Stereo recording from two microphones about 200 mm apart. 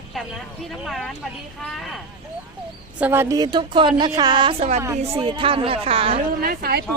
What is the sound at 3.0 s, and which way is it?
Speech, 10° right (ahead or behind).